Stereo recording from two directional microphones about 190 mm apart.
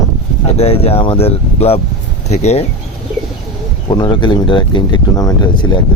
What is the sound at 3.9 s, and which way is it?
Speech, 25° left (ahead or behind).